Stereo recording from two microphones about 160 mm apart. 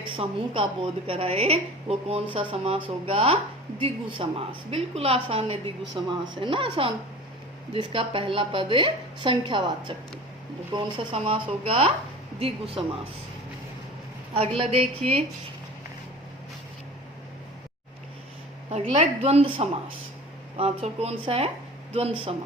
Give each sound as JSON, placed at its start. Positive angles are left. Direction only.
{"t": 0.0, "sound": "a woman's voice", "side_deg": -30}
{"t": 14.3, "sound": "a woman's voice", "side_deg": -35}
{"t": 18.7, "sound": "a woman's voice", "side_deg": -45}